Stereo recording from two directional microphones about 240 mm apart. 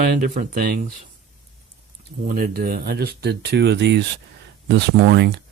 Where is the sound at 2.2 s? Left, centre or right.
Right.